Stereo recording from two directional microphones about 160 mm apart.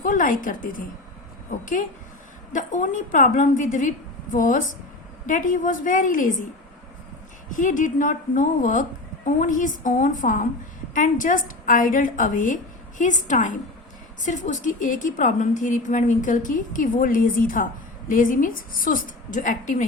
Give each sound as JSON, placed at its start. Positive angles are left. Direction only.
{"t": 0.0, "sound": "a woman's voice", "side_deg": 55}
{"t": 7.5, "sound": "a woman's voice", "side_deg": 55}